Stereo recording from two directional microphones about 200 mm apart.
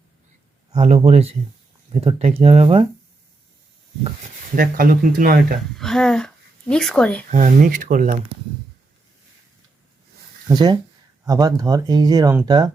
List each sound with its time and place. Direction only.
0.7 s speech: 30° right (ahead or behind)
4.5 s speech: 45° right (ahead or behind)
5.7 s speech: centre (ahead or behind)
7.3 s speech: 35° right (ahead or behind)
10.5 s speech: 20° right (ahead or behind)